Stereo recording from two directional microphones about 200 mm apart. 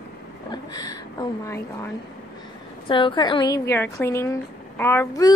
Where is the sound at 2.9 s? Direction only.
25° left (ahead or behind).